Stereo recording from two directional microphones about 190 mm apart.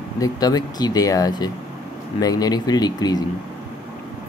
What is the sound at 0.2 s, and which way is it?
Speech, 20° left (ahead or behind).